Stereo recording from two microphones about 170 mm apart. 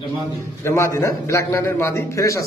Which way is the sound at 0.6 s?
15° left (ahead or behind).